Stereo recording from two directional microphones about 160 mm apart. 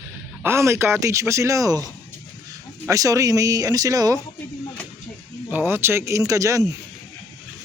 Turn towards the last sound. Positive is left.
turn(degrees=-20)  # may be behind; listen again after turning